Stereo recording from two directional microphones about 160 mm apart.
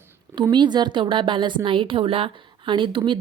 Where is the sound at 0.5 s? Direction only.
30° right (ahead or behind).